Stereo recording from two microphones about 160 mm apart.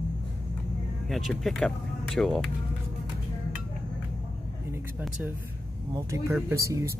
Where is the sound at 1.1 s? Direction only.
Centre (ahead or behind).